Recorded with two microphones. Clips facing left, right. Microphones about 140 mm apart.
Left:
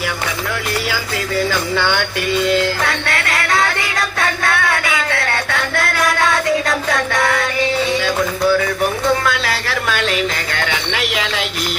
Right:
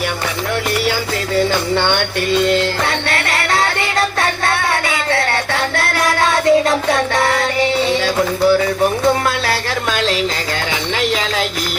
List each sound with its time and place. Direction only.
1.4 s music: 25° right (ahead or behind)